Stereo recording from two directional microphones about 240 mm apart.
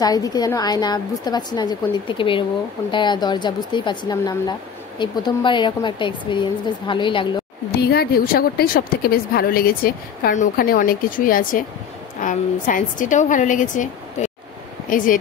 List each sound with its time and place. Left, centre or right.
0.0 s a woman's voice: centre
7.7 s a woman's voice: left